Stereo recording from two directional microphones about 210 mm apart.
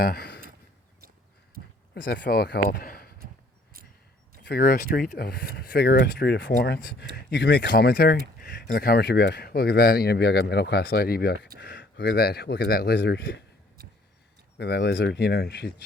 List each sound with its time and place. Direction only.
0.0 s speech: 50° left (ahead or behind)
2.0 s speech: 55° left (ahead or behind)
4.4 s speech: 45° left (ahead or behind)
14.6 s speech: 50° left (ahead or behind)